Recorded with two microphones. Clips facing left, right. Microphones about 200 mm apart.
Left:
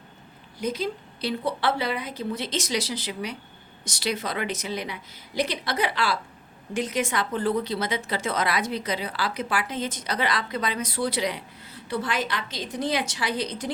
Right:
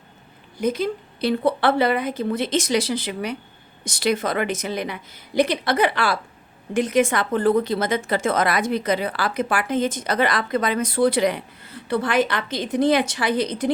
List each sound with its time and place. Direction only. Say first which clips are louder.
0.6 s a woman's voice: right 6 dB; 55° right (ahead or behind)